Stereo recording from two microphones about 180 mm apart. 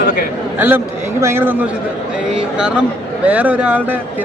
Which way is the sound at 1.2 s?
15° right (ahead or behind).